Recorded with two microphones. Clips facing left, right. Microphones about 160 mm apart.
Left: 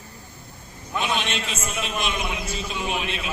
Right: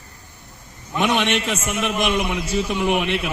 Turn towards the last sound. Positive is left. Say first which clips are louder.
# right 8 dB
turn(degrees=-70)  # may be behind; listen again after turning